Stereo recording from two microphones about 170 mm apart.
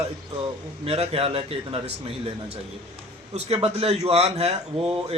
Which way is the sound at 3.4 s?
35° right (ahead or behind).